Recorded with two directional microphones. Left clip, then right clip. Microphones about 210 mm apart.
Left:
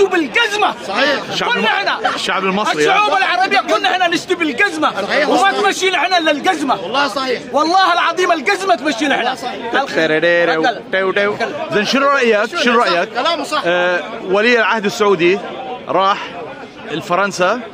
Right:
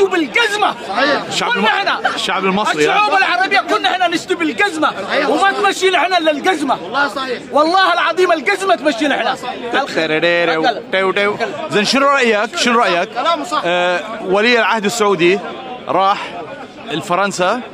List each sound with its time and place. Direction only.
0.0 s a sound: 5° right (ahead or behind)
0.9 s a man's voice: 45° left (ahead or behind)
1.3 s a man's voice: 10° right (ahead or behind)
6.9 s speech: 35° left (ahead or behind)
7.5 s a man's voice: 5° right (ahead or behind)
13.2 s speech: 40° left (ahead or behind)
13.7 s a man's voice: 15° right (ahead or behind)